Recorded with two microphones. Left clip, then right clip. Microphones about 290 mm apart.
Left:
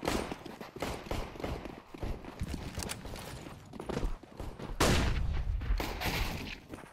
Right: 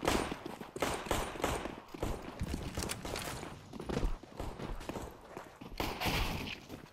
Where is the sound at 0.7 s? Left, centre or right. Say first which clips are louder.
Right 4 dB; right.